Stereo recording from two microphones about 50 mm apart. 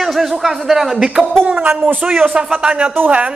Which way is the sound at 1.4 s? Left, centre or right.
Right.